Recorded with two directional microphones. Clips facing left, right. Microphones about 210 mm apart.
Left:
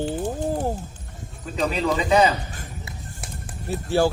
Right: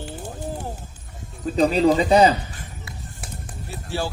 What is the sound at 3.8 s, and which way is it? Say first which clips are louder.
Speech: left 8 dB; 50° left (ahead or behind).